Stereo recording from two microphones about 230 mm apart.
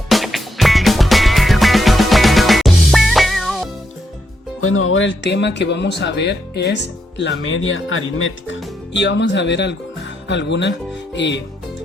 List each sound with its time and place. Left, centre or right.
0.1 s music: centre
4.6 s speech: left